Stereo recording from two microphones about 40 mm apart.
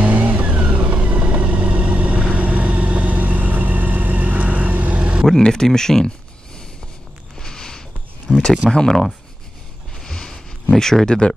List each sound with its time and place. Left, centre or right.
0.0 s vehicle: right
5.5 s speech: centre
7.3 s a sound: centre
8.3 s speech: right
8.6 s speech: centre
9.9 s a sound: centre
10.8 s speech: centre